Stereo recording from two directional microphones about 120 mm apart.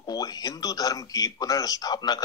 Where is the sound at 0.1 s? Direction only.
30° left (ahead or behind).